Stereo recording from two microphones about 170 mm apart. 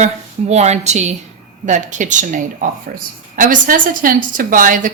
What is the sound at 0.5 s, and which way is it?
Speech, 40° right (ahead or behind).